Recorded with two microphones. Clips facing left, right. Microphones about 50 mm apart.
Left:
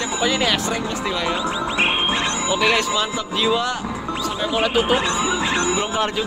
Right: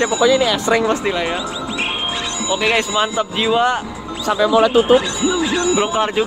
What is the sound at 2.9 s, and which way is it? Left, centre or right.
Speech, right.